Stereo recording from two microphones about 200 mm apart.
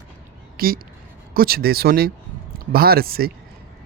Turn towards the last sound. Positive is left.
turn(degrees=-50)  # may be behind; listen again after turning